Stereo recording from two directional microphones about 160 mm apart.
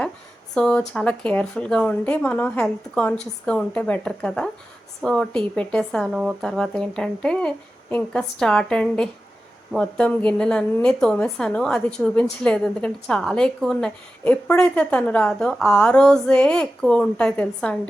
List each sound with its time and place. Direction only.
0.5 s a woman's voice: 5° left (ahead or behind)